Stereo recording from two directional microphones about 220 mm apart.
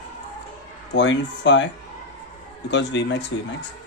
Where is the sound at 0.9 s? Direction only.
55° left (ahead or behind).